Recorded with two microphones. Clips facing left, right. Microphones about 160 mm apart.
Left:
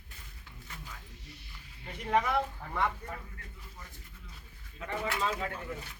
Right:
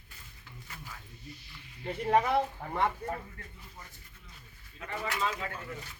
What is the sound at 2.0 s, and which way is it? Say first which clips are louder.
Speech: right 3 dB; 30° right (ahead or behind).